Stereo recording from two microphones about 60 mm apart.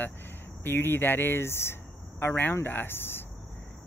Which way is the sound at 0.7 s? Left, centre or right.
Left.